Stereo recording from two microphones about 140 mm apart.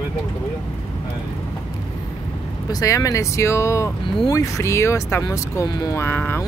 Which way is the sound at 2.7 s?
25° left (ahead or behind).